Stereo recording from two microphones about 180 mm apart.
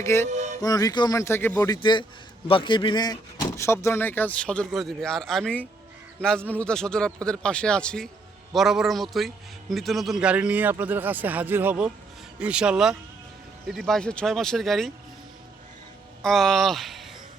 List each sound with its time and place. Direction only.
0.0 s a man's voice: 15° left (ahead or behind)
16.2 s speech: centre (ahead or behind)